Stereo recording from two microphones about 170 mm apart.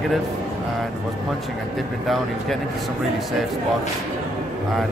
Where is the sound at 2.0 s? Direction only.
Centre (ahead or behind).